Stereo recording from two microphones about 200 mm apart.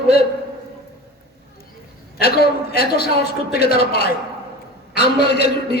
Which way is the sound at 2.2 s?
55° left (ahead or behind).